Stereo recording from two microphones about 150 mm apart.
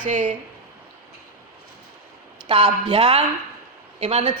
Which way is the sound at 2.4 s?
35° right (ahead or behind).